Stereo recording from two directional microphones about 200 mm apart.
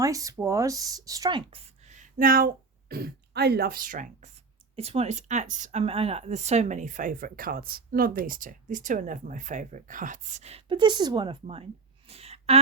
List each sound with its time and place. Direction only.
0.0 s speech: 15° right (ahead or behind); by 4.3 s 40° right (ahead or behind)
4.7 s speech: 30° right (ahead or behind)